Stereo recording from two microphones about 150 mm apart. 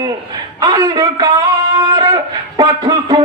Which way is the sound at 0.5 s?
25° right (ahead or behind).